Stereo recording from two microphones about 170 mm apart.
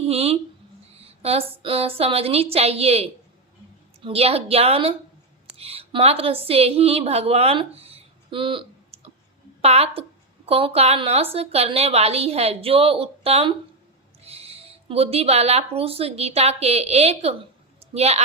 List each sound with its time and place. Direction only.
0.1 s a woman's voice: 35° right (ahead or behind)